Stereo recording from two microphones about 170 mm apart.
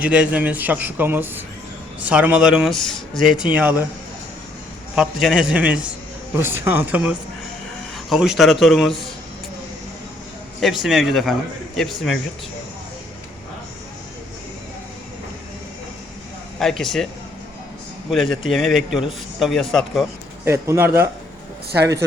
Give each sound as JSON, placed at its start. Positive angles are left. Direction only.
{"t": 0.0, "sound": "speech", "side_deg": -5}
{"t": 4.9, "sound": "speech", "side_deg": -5}
{"t": 10.8, "sound": "speech", "side_deg": 0}
{"t": 16.6, "sound": "speech", "side_deg": 0}
{"t": 18.1, "sound": "speech", "side_deg": 0}
{"t": 20.4, "sound": "speech", "side_deg": -15}